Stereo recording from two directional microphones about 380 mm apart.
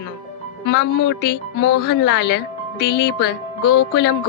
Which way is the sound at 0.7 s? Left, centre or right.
Left.